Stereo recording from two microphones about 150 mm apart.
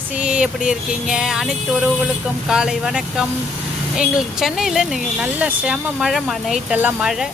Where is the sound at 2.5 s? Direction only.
5° right (ahead or behind).